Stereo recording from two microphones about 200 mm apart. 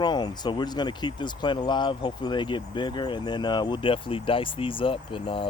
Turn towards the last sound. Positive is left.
turn(degrees=25)  # may be behind; listen again after turning